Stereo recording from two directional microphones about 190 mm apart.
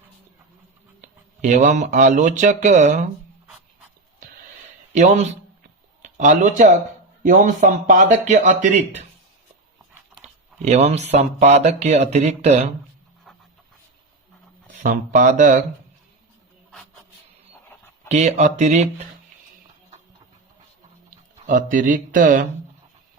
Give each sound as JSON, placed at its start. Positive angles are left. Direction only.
{"t": 1.0, "sound": "speech", "side_deg": -40}
{"t": 4.9, "sound": "speech", "side_deg": -35}
{"t": 10.7, "sound": "speech", "side_deg": -35}
{"t": 13.3, "sound": "a sound", "side_deg": 0}
{"t": 14.8, "sound": "speech", "side_deg": -45}
{"t": 18.1, "sound": "speech", "side_deg": -35}
{"t": 21.1, "sound": "speech", "side_deg": -45}